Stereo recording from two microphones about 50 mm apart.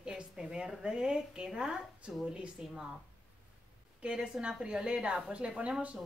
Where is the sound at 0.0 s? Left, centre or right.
Centre.